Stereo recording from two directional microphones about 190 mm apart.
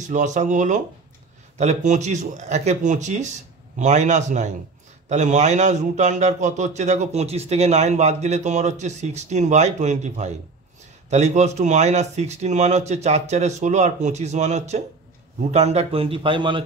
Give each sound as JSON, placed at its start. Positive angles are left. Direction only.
{"t": 0.1, "sound": "a man's voice", "side_deg": -40}